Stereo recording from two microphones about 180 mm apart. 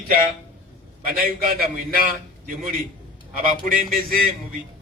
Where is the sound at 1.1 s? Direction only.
55° right (ahead or behind).